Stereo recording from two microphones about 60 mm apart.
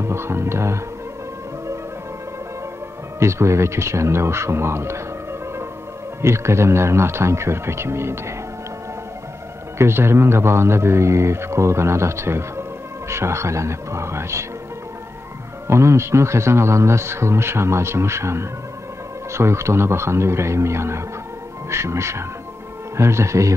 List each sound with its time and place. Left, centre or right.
0.0 s music: right
3.2 s speech: right
6.2 s speech: right
9.8 s speech: right
15.6 s speech: right